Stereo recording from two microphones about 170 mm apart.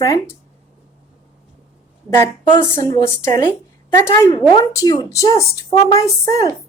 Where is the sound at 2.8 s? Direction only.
20° left (ahead or behind).